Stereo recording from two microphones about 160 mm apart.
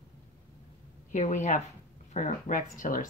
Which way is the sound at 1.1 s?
50° left (ahead or behind).